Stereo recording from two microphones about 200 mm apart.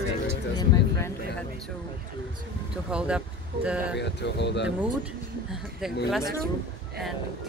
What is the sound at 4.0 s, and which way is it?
Speech, 60° left (ahead or behind).